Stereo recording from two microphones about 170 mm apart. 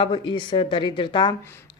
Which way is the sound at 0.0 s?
30° left (ahead or behind).